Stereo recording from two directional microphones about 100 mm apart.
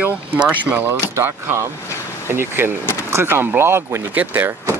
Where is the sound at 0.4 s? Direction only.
15° right (ahead or behind).